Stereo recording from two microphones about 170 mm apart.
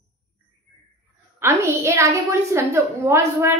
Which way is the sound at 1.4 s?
15° right (ahead or behind).